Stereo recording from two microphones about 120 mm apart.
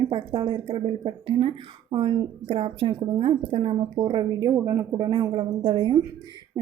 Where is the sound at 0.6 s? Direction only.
45° right (ahead or behind).